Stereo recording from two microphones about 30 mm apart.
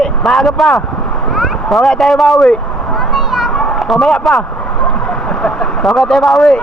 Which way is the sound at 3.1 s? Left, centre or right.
Centre.